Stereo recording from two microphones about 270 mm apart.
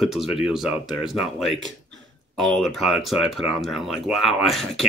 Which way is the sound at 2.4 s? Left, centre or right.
Centre.